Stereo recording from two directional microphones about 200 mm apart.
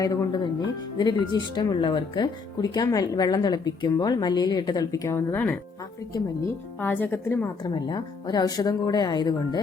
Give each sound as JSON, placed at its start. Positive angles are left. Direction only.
{"t": 0.0, "sound": "speech", "side_deg": 20}